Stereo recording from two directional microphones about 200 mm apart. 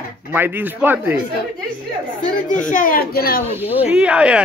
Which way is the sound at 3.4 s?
10° right (ahead or behind).